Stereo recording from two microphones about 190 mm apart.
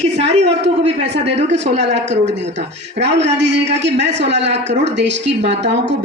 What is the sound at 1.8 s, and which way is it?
Speech, 65° right (ahead or behind).